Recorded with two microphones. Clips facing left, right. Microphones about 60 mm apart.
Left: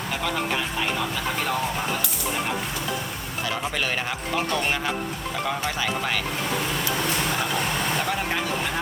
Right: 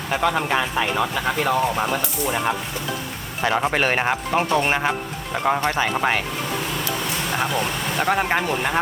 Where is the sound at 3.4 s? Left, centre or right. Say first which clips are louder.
Right 8 dB; right.